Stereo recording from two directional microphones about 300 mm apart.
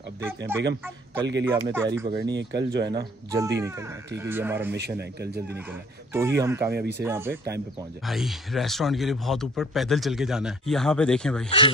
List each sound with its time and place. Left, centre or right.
0.5 s speech: centre
2.3 s speech: right
2.9 s speech: centre
4.7 s speech: right
5.6 s speech: centre